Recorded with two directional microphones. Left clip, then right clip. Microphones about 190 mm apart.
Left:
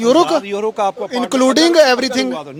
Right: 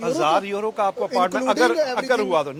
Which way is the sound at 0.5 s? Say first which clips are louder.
Left 5 dB; 35° left (ahead or behind).